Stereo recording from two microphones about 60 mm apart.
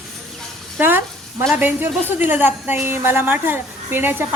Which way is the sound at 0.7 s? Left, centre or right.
Right.